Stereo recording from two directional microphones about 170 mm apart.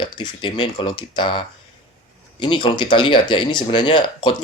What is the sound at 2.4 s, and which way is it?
Speech, 30° left (ahead or behind).